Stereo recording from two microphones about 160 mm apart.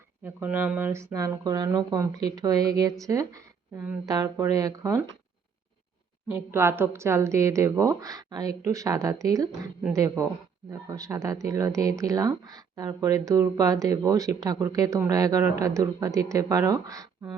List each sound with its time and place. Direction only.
0.3 s speech: 10° right (ahead or behind)
6.3 s speech: 15° right (ahead or behind)